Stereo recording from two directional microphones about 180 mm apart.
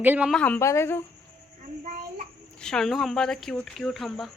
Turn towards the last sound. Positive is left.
turn(degrees=0)  # may be behind; listen again after turning